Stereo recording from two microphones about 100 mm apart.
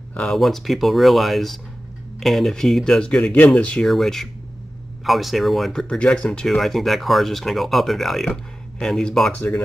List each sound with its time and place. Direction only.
0.3 s speech: centre (ahead or behind)
9.3 s speech: 15° left (ahead or behind)